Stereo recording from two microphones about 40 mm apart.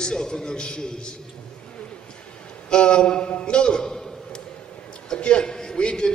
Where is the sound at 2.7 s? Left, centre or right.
Left.